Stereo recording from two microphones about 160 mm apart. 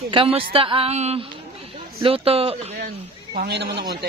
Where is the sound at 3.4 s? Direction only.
90° right.